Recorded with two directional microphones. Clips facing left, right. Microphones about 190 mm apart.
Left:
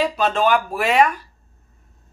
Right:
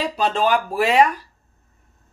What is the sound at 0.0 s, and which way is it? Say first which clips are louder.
A man's voice: left 2 dB; 35° right (ahead or behind).